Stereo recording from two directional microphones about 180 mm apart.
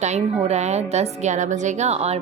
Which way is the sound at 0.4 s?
40° right (ahead or behind).